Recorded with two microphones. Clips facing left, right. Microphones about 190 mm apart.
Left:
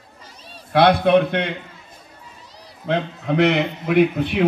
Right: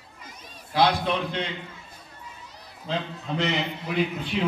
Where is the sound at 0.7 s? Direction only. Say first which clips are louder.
Left 9 dB; 60° left (ahead or behind).